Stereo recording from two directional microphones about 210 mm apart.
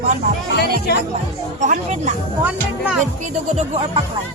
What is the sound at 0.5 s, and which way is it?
Speech, 50° left (ahead or behind).